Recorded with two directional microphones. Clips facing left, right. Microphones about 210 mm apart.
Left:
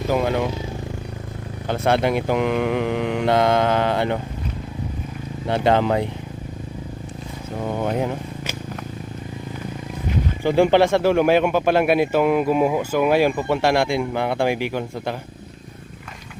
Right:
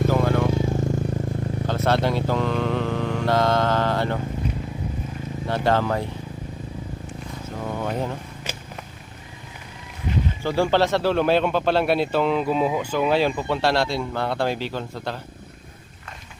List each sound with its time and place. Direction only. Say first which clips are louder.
0.1 s motorcycle: left 5 dB; 15° left (ahead or behind)
1.6 s speech: left 3 dB; 15° left (ahead or behind)
5.5 s speech: left 4 dB; 20° left (ahead or behind)
7.6 s a sound: left 4 dB; 20° left (ahead or behind)
10.4 s speech: left 5 dB; 15° left (ahead or behind)